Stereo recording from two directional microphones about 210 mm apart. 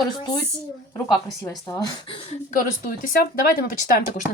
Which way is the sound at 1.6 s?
20° left (ahead or behind).